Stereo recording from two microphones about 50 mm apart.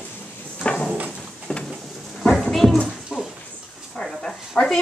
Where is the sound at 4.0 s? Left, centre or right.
Centre.